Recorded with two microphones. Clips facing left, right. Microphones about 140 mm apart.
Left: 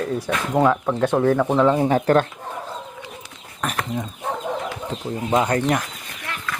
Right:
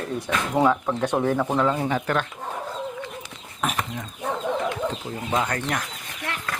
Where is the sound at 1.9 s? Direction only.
40° left (ahead or behind).